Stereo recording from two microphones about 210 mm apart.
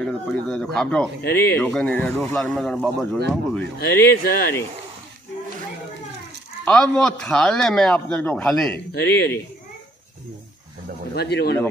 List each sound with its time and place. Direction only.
0.0 s a man's voice: 5° left (ahead or behind)
1.2 s speech: 50° left (ahead or behind)
1.6 s a man's voice: 5° left (ahead or behind)
3.8 s speech: 50° left (ahead or behind)
6.6 s a man's voice: 5° left (ahead or behind)
8.9 s speech: 50° left (ahead or behind)
11.1 s speech: 50° left (ahead or behind)